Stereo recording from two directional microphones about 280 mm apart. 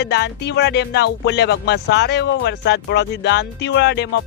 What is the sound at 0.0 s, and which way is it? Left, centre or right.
Music, left.